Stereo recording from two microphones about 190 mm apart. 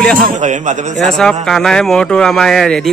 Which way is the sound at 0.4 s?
40° right (ahead or behind).